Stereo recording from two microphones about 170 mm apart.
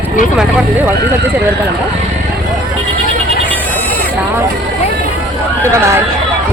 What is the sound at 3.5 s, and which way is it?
Bleat, 10° left (ahead or behind).